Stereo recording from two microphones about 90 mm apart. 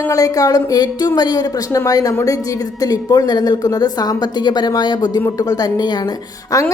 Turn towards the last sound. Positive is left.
turn(degrees=40)  # may be behind; listen again after turning